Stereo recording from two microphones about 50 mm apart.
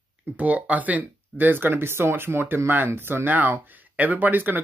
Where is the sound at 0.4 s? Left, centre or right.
Right.